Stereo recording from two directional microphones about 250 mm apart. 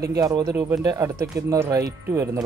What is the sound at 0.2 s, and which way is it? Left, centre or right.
Speech, centre.